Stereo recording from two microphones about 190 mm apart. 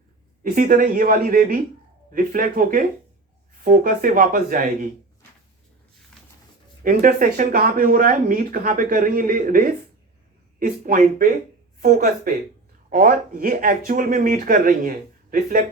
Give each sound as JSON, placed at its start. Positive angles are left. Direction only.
{"t": 0.4, "sound": "speech", "side_deg": -45}
{"t": 6.8, "sound": "speech", "side_deg": -45}